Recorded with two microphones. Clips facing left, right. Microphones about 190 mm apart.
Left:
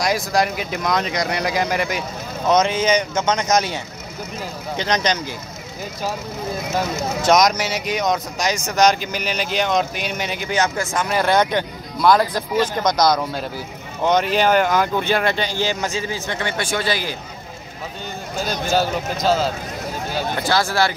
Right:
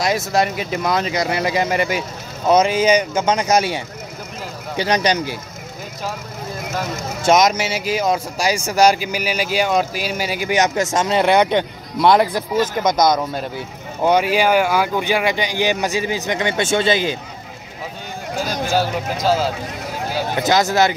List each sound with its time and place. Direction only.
0.0 s speech: centre (ahead or behind)
4.7 s speech: 10° right (ahead or behind)
7.5 s speech: 25° right (ahead or behind)
8.1 s speech: 10° right (ahead or behind)
14.0 s speech: 10° right (ahead or behind)
18.7 s speech: 10° right (ahead or behind)
20.4 s speech: 20° right (ahead or behind)